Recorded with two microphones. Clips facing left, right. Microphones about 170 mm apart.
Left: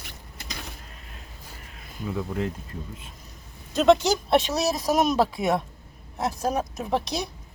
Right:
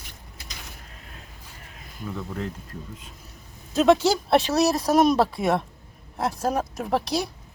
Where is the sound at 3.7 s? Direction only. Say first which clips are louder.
Even; centre (ahead or behind).